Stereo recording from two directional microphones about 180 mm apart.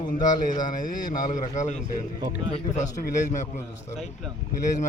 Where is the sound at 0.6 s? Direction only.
45° left (ahead or behind).